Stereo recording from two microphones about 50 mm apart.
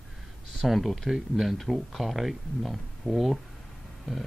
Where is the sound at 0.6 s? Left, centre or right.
Centre.